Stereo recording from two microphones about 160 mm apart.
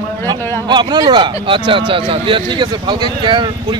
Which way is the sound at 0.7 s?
25° right (ahead or behind).